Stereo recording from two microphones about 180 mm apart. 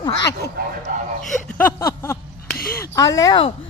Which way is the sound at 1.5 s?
15° left (ahead or behind).